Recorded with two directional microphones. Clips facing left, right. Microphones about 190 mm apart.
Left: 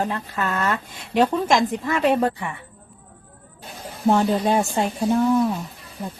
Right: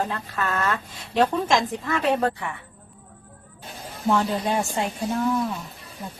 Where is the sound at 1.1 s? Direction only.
15° left (ahead or behind).